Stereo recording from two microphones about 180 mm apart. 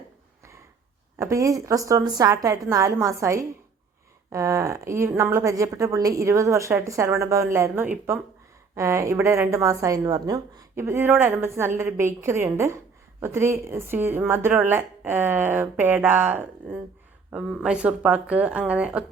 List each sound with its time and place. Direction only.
1.2 s a woman's voice: 15° right (ahead or behind)